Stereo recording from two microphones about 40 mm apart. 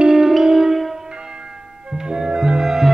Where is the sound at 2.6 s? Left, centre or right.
Centre.